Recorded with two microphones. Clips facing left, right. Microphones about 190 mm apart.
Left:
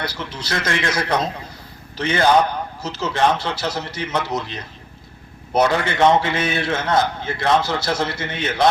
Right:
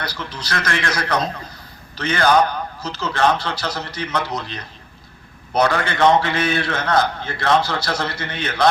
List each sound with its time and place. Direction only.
0.0 s a man's voice: 25° left (ahead or behind)